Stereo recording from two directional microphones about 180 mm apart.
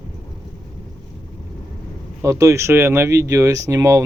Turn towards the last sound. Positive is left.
turn(degrees=-15)  # may be behind; listen again after turning